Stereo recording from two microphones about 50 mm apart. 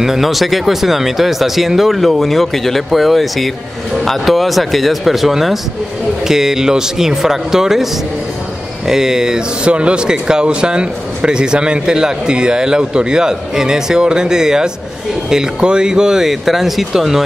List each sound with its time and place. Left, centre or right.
0.0 s speech: centre